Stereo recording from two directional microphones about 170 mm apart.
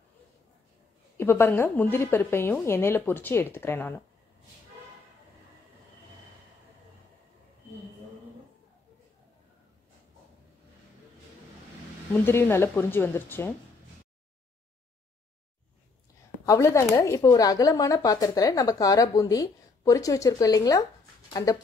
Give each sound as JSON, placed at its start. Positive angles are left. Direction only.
{"t": 1.1, "sound": "a woman's voice", "side_deg": 15}
{"t": 12.3, "sound": "a woman's voice", "side_deg": 15}
{"t": 16.4, "sound": "speech", "side_deg": 20}